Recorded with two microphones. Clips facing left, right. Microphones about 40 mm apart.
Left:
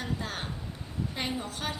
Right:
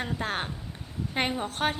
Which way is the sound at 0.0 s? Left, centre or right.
Right.